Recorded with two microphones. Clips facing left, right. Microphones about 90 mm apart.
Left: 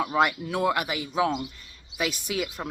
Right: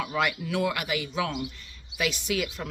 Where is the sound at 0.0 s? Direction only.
35° left (ahead or behind).